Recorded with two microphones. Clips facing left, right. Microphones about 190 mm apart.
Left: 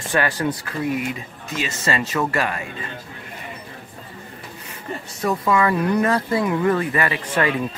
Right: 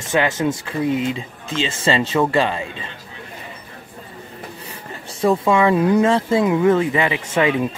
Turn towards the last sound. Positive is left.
turn(degrees=-20)  # may be behind; listen again after turning